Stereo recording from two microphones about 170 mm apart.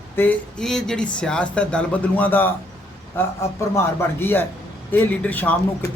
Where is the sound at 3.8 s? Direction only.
15° left (ahead or behind).